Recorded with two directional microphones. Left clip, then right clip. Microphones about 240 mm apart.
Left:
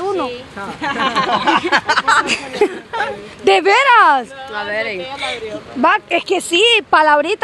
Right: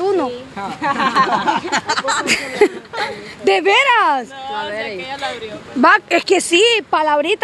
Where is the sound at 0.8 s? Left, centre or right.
Centre.